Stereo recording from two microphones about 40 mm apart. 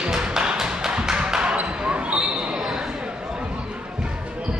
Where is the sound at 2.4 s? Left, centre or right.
Centre.